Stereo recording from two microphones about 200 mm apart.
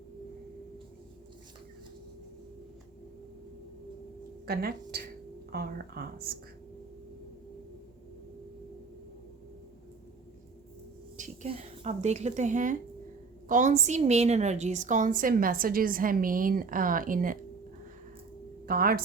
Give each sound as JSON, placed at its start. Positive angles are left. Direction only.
{"t": 4.4, "sound": "a woman's voice", "side_deg": -50}
{"t": 11.2, "sound": "a woman's voice", "side_deg": -30}
{"t": 18.6, "sound": "a woman's voice", "side_deg": -45}